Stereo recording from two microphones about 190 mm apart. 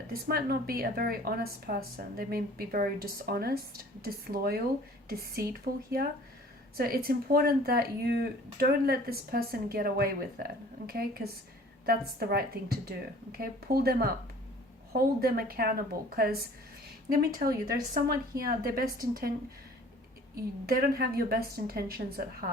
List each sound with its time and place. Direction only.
0.1 s speech: 55° right (ahead or behind)
6.7 s speech: 50° right (ahead or behind)
17.9 s speech: 50° right (ahead or behind)
20.3 s speech: 55° right (ahead or behind)